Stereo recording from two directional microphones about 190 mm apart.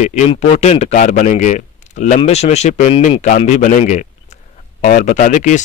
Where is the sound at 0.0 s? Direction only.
40° left (ahead or behind).